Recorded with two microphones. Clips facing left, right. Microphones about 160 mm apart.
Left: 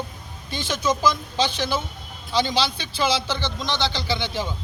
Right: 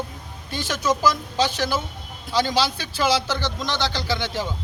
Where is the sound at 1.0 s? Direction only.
5° right (ahead or behind).